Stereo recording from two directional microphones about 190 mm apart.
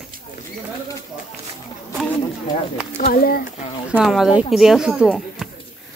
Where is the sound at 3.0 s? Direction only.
50° left (ahead or behind).